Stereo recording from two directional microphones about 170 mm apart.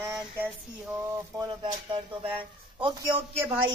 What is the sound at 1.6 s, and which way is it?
Speech, 30° right (ahead or behind).